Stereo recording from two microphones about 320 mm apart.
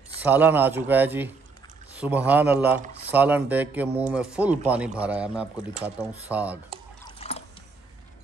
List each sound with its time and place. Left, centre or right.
0.2 s speech: centre
7.2 s trickle: centre